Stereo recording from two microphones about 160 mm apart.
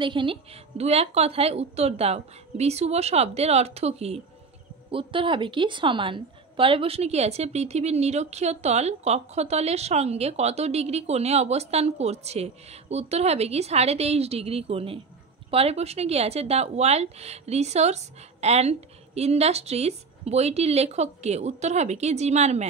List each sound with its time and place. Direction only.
0.0 s a woman's voice: 30° right (ahead or behind)